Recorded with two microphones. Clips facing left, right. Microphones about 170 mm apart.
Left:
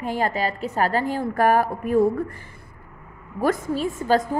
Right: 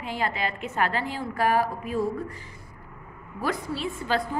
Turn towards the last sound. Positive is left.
turn(degrees=45)  # may be behind; listen again after turning